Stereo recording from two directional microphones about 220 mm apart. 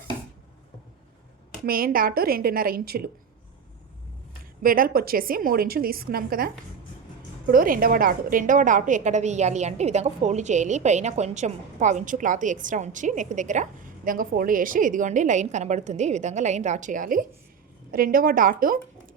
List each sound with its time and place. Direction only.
1.6 s a woman's voice: 40° right (ahead or behind)
4.6 s a woman's voice: 40° right (ahead or behind)
7.5 s a woman's voice: 40° right (ahead or behind)